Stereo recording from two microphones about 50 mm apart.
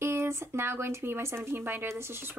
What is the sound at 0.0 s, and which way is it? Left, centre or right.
A woman's voice, right.